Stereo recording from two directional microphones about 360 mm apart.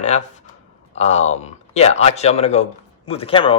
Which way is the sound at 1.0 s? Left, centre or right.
Centre.